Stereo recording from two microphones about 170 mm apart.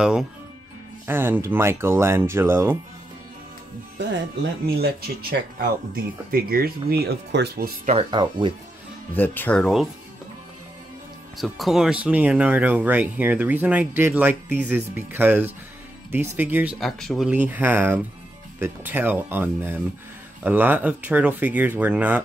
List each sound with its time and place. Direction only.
1.0 s speech: 15° right (ahead or behind)
4.6 s speech: 65° right (ahead or behind)
7.9 s speech: 30° right (ahead or behind)
9.1 s speech: 10° left (ahead or behind)
11.3 s speech: centre (ahead or behind)
16.8 s speech: centre (ahead or behind)
17.3 s speech: 10° right (ahead or behind)